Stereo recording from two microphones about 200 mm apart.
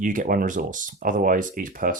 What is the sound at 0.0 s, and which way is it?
Speech, 40° right (ahead or behind).